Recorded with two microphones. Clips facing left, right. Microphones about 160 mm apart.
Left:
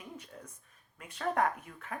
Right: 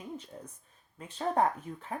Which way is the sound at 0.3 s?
25° right (ahead or behind).